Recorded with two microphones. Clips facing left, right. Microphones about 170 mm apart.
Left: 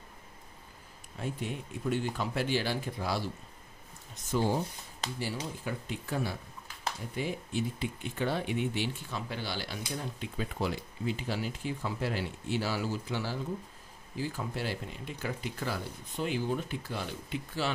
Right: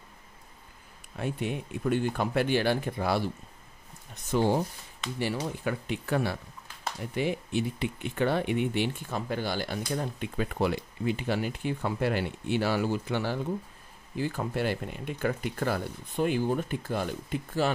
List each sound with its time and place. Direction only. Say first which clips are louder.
1.1 s speech: right 5 dB; 65° right (ahead or behind); by 17.6 s 50° right (ahead or behind)